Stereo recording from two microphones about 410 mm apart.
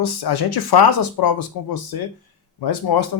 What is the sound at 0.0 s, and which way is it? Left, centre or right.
Speech, left.